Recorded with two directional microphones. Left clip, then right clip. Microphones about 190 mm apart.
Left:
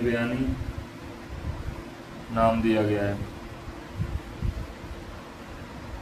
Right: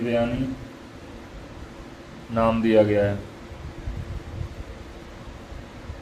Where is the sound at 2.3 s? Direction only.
30° right (ahead or behind).